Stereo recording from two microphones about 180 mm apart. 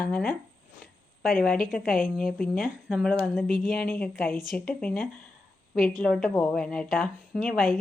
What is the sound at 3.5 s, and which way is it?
Speech, 50° left (ahead or behind).